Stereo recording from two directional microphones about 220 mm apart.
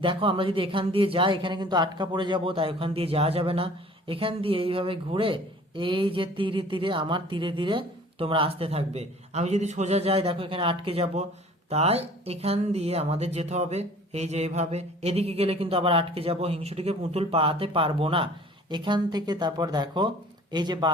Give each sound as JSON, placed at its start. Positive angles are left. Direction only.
{"t": 0.0, "sound": "speech", "side_deg": -25}